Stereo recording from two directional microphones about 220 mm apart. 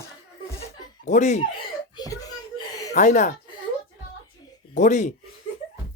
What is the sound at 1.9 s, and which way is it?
Whimper, 15° left (ahead or behind).